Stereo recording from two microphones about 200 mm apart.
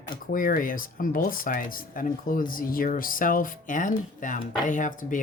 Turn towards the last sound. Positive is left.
turn(degrees=40)  # may be behind; listen again after turning